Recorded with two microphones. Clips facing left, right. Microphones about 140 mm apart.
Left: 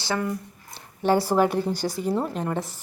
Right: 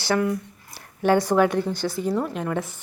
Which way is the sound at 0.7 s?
30° left (ahead or behind).